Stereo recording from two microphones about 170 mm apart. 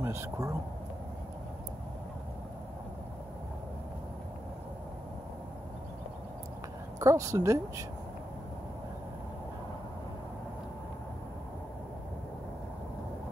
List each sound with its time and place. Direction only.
0.0 s speech: 15° right (ahead or behind)
7.0 s speech: 20° right (ahead or behind)